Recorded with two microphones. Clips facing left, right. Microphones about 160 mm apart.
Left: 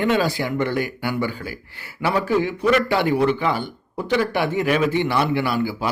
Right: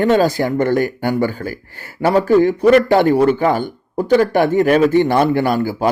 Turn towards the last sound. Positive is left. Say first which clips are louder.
# right 6 dB
turn(degrees=-45)  # may be behind; listen again after turning